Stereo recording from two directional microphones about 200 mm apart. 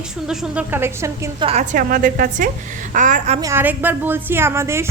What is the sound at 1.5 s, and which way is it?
A woman's voice, 40° right (ahead or behind).